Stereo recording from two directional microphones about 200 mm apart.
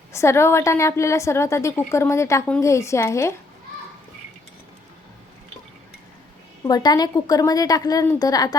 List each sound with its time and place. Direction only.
0.1 s a woman's voice: 15° left (ahead or behind)
6.7 s a woman's voice: 20° left (ahead or behind)